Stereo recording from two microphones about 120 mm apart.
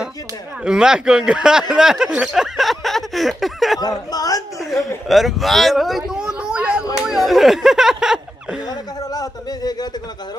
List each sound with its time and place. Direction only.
0.7 s speech: 5° right (ahead or behind)
3.8 s speech: 30° left (ahead or behind)
4.6 s speech: centre (ahead or behind)
8.6 s speech: 30° left (ahead or behind)